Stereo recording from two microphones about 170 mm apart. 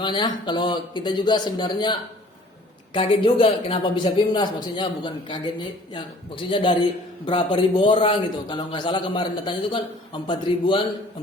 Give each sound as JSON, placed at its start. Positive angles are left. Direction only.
{"t": 0.0, "sound": "speech", "side_deg": 25}